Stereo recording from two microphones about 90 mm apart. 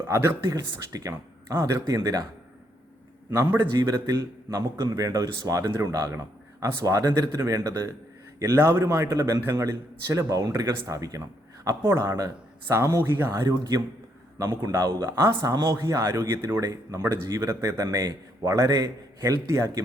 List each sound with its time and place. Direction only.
0.1 s speech: 30° right (ahead or behind)
3.2 s speech: 30° right (ahead or behind)
3.8 s speech: 40° right (ahead or behind)
11.7 s speech: 25° right (ahead or behind)
13.4 s a man's voice: 45° right (ahead or behind)